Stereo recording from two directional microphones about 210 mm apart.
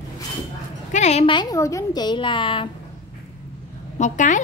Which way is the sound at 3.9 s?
35° left (ahead or behind).